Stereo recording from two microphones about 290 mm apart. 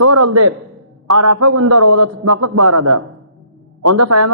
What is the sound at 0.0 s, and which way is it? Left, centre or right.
A man's voice, right.